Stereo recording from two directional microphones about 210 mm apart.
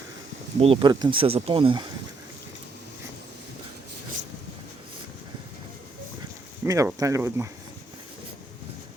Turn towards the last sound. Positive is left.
turn(degrees=-10)  # may be behind; listen again after turning